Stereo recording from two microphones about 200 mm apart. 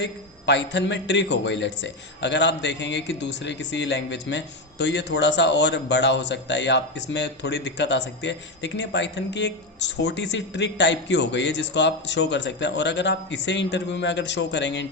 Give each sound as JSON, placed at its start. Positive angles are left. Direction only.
{"t": 0.0, "sound": "a man's voice", "side_deg": 60}